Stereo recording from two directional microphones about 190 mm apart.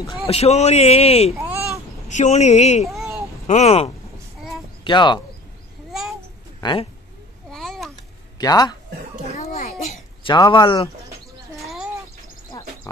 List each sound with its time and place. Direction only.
0.3 s a man's voice: 35° left (ahead or behind)
2.9 s a sound: centre (ahead or behind)
3.4 s a man's voice: 35° left (ahead or behind)
5.9 s babbling: centre (ahead or behind)
6.6 s speech: 25° left (ahead or behind)
7.5 s babbling: centre (ahead or behind)
8.4 s speech: 20° left (ahead or behind)
9.4 s a sound: 40° left (ahead or behind)
10.2 s speech: 25° left (ahead or behind)
11.5 s a sound: centre (ahead or behind)
12.5 s pig: 20° left (ahead or behind)